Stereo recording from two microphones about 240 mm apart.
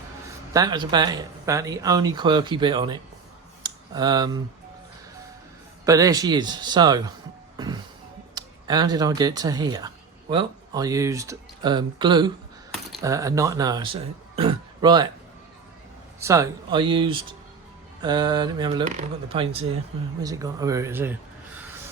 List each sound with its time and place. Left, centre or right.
0.3 s speech: centre
3.6 s a sound: centre
5.8 s speech: centre
7.5 s music: centre
8.4 s speech: centre
16.2 s speech: centre